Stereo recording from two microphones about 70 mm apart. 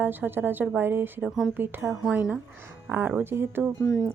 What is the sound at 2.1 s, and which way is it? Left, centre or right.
Speech, centre.